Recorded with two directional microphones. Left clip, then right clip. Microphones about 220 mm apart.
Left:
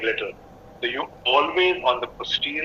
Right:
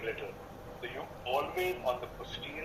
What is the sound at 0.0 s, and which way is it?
A man's voice, 40° left (ahead or behind).